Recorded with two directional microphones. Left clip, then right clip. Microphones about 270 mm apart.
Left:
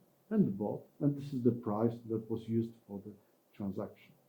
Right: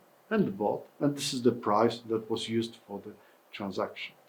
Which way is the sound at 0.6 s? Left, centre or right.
Right.